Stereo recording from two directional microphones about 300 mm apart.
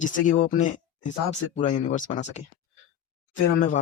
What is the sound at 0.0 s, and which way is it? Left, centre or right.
Speech, left.